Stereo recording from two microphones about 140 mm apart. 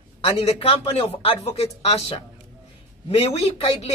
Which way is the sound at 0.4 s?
45° left (ahead or behind).